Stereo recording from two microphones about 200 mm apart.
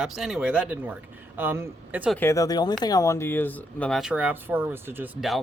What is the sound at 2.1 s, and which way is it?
Speech, 15° left (ahead or behind).